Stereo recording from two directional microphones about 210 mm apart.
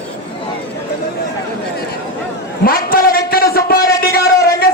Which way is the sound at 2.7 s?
45° left (ahead or behind).